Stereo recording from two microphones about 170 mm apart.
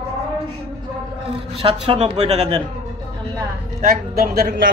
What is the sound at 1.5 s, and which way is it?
Speech, 35° right (ahead or behind).